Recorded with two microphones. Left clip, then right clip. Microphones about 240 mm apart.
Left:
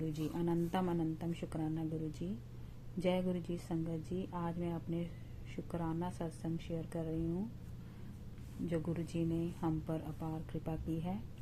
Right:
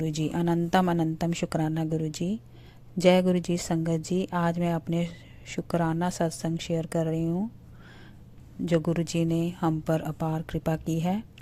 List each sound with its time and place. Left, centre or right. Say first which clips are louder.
0.0 s speech: right 10 dB; right
8.6 s speech: right 13 dB; right